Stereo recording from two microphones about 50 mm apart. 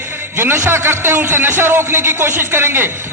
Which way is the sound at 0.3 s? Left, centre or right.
Right.